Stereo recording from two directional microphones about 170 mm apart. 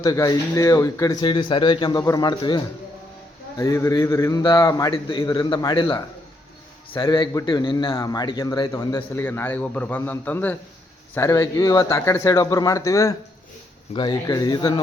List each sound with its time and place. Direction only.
0.0 s a man's voice: 20° left (ahead or behind)
3.6 s a man's voice: 20° left (ahead or behind)